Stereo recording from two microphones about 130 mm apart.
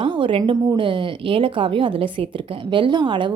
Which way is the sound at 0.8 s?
40° right (ahead or behind).